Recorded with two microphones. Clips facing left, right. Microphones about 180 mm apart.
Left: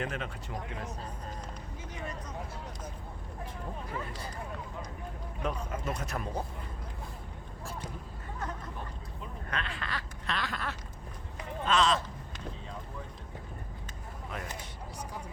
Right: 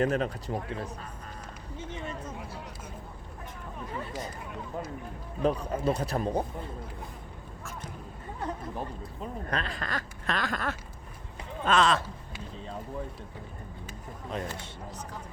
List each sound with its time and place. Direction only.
0.0 s speech: 40° right (ahead or behind)
1.8 s a sound: 25° right (ahead or behind)
5.4 s speech: 35° right (ahead or behind)
8.4 s speech: 35° right (ahead or behind); by 12.0 s 55° right (ahead or behind)